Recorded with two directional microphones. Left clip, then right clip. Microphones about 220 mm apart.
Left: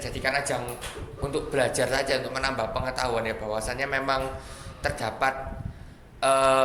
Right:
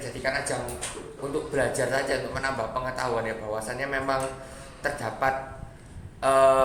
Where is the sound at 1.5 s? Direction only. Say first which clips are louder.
Left 1 dB; 45° left (ahead or behind).